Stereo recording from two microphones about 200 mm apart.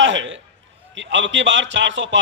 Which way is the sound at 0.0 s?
65° right (ahead or behind).